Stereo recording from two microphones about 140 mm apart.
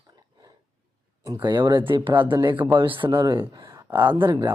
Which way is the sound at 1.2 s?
30° right (ahead or behind).